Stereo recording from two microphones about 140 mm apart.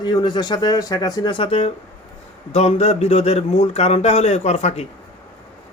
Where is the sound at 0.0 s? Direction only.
30° left (ahead or behind); by 4.9 s 50° left (ahead or behind).